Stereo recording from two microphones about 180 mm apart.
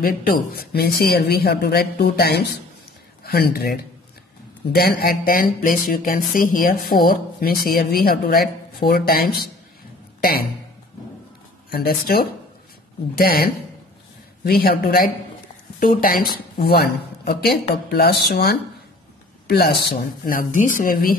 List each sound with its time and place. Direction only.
0.0 s speech: 60° left (ahead or behind)
11.7 s speech: 55° left (ahead or behind)
16.5 s speech: 60° left (ahead or behind)